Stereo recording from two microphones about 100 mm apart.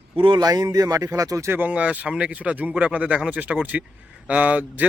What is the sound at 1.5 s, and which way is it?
Speech, 15° right (ahead or behind).